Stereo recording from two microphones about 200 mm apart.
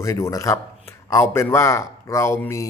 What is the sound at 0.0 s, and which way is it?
Speech, 15° left (ahead or behind).